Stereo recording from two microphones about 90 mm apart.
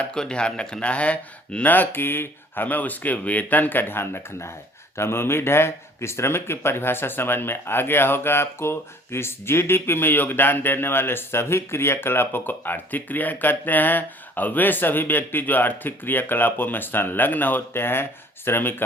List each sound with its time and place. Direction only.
0.0 s speech: 10° left (ahead or behind); by 18.7 s 25° left (ahead or behind)